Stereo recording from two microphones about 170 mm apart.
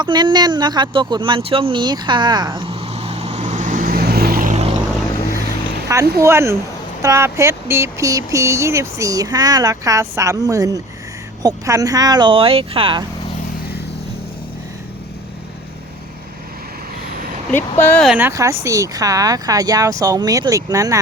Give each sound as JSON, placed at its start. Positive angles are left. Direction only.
{"t": 0.0, "sound": "a sound", "side_deg": -25}
{"t": 5.9, "sound": "speech", "side_deg": -15}
{"t": 17.5, "sound": "speech", "side_deg": 10}
{"t": 18.0, "sound": "speech", "side_deg": -5}
{"t": 18.3, "sound": "speech", "side_deg": -20}